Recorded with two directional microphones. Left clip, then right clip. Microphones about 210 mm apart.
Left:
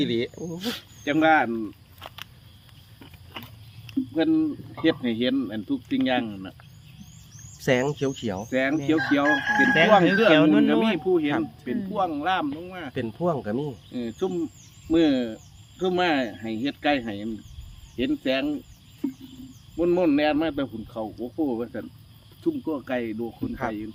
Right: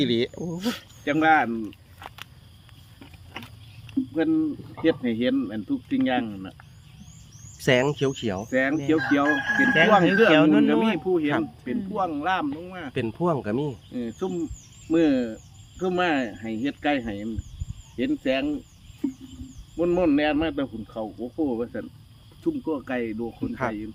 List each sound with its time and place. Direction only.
0.0 s speech: 55° right (ahead or behind)
0.6 s speech: 5° right (ahead or behind)
3.3 s a sound: 5° left (ahead or behind)
4.1 s a man's voice: 5° left (ahead or behind)
7.6 s speech: 35° right (ahead or behind)
8.4 s a man's voice: centre (ahead or behind)
9.2 s speech: 20° right (ahead or behind)
9.7 s a man's voice: centre (ahead or behind)
12.9 s speech: 35° right (ahead or behind)
13.9 s a man's voice: centre (ahead or behind)
19.0 s a sound: centre (ahead or behind)
19.7 s a man's voice: 5° right (ahead or behind)